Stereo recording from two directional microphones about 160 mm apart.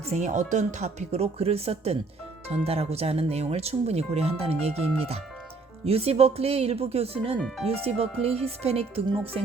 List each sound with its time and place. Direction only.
0.0 s speech: 45° right (ahead or behind)